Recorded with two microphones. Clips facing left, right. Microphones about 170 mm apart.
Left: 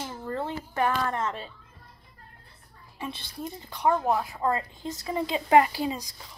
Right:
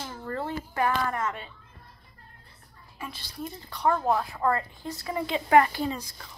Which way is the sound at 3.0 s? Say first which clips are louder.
Left 2 dB; 25° left (ahead or behind).